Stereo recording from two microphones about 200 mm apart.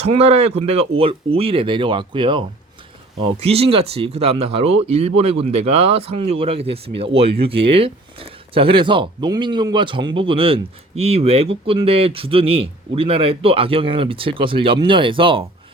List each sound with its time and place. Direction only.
0.0 s speech: 30° right (ahead or behind)